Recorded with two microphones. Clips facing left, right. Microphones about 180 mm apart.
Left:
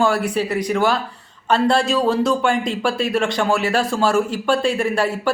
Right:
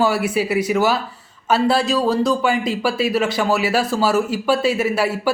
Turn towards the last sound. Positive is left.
turn(degrees=-5)  # may be behind; listen again after turning